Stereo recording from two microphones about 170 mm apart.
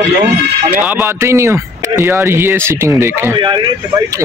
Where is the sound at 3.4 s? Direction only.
25° right (ahead or behind).